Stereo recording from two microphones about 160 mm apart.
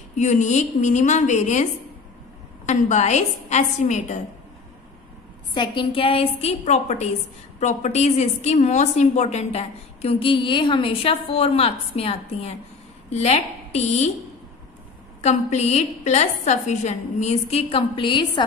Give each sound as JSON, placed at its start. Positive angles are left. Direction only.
{"t": 0.1, "sound": "a woman's voice", "side_deg": 50}
{"t": 5.5, "sound": "a woman's voice", "side_deg": 30}
{"t": 15.2, "sound": "a woman's voice", "side_deg": 45}